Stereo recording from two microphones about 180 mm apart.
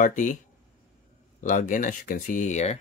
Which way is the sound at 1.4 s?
45° left (ahead or behind).